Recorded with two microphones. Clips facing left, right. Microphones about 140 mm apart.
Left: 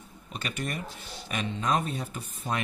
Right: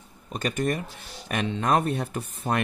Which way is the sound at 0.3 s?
45° right (ahead or behind).